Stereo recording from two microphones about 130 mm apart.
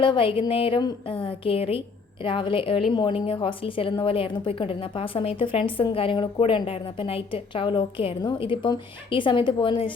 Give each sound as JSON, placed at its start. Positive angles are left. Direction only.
{"t": 0.0, "sound": "a woman's voice", "side_deg": 40}